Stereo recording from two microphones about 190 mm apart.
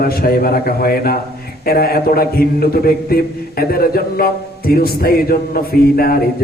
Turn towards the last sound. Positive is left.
turn(degrees=50)  # may be behind; listen again after turning